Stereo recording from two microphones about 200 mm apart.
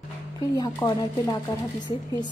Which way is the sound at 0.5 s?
20° left (ahead or behind).